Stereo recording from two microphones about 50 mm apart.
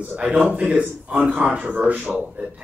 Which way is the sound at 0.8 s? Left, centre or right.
Right.